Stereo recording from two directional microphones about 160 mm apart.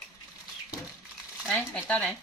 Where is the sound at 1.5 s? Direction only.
5° left (ahead or behind).